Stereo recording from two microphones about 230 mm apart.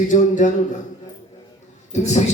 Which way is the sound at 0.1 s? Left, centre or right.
Left.